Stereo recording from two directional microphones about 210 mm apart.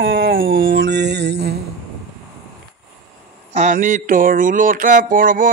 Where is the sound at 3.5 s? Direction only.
35° right (ahead or behind).